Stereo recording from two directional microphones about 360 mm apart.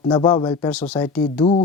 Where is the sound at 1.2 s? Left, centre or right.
Centre.